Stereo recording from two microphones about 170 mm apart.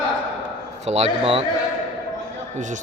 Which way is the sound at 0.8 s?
40° right (ahead or behind).